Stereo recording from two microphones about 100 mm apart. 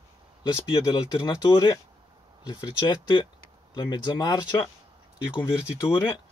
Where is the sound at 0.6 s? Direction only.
55° left (ahead or behind).